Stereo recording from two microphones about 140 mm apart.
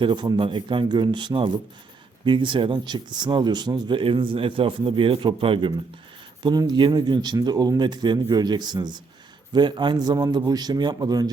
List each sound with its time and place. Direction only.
0.0 s a man's voice: 35° right (ahead or behind)